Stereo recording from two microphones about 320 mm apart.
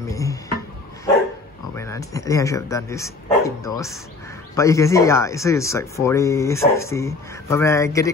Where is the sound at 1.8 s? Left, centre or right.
Centre.